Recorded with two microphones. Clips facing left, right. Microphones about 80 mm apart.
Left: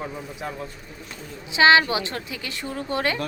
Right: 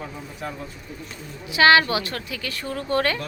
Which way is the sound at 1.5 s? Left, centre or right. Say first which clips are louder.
Even; left.